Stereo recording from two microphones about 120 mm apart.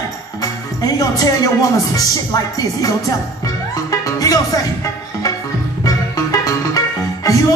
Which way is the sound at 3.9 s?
30° left (ahead or behind).